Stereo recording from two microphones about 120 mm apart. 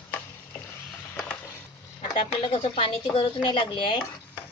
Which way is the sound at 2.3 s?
50° left (ahead or behind).